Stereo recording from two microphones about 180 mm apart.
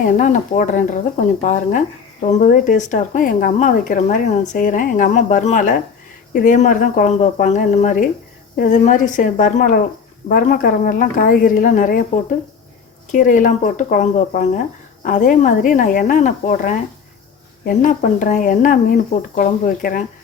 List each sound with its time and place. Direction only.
0.0 s speech: 45° left (ahead or behind)
13.1 s speech: 45° left (ahead or behind)